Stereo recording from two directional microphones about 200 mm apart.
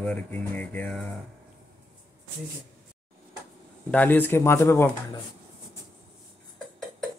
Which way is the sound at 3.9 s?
10° left (ahead or behind).